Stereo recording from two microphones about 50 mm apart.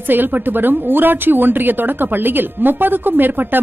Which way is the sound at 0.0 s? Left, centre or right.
Right.